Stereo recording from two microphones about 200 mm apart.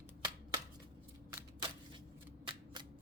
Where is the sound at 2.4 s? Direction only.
25° right (ahead or behind).